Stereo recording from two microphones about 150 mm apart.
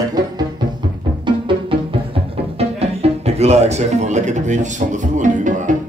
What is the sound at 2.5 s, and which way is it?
Music, 45° right (ahead or behind).